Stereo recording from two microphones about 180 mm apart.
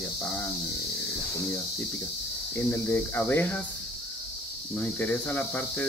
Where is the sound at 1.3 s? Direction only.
15° left (ahead or behind).